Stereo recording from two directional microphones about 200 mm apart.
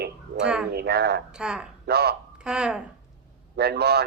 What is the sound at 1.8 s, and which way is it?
Speech, 55° right (ahead or behind).